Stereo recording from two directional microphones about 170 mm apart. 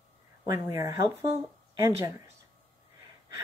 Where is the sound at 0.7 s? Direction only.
15° right (ahead or behind).